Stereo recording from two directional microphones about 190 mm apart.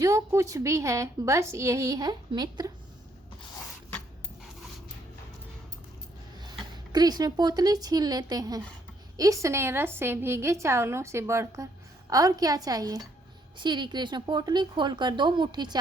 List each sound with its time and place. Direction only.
0.0 s a woman's voice: 15° right (ahead or behind)
6.9 s a woman's voice: 20° right (ahead or behind)